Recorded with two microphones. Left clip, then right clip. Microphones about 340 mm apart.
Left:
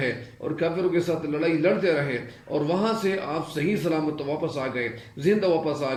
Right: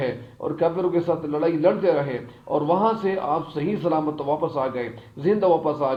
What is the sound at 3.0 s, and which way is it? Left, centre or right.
Speech, right.